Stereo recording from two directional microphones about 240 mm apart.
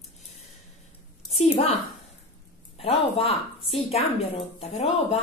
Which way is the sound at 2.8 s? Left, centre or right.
Left.